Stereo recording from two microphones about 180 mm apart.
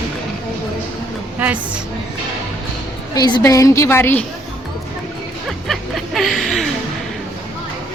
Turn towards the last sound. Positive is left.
turn(degrees=0)  # may be behind; listen again after turning